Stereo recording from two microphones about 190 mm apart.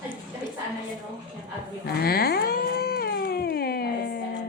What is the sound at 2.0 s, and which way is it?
Cat, 55° left (ahead or behind).